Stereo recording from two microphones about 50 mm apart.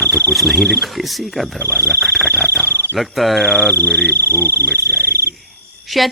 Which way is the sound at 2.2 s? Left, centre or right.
Left.